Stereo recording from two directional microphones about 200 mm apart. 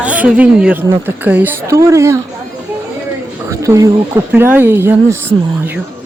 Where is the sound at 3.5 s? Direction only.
15° right (ahead or behind).